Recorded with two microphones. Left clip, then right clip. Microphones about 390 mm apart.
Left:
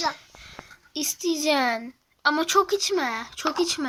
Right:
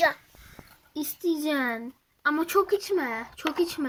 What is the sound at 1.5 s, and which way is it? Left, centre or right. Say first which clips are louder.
Speech: left 5 dB; centre.